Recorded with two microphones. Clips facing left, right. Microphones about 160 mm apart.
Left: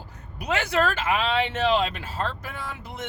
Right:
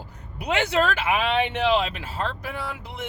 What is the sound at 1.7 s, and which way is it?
Speech, 5° right (ahead or behind).